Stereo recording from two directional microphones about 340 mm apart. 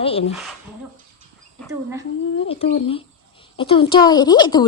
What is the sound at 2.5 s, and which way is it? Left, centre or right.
A child's voice, centre.